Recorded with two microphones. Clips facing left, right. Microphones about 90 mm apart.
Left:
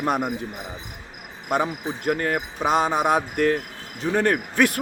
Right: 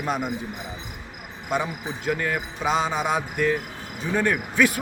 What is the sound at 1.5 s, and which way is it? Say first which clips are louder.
A man's voice: left 3 dB; 50° left (ahead or behind).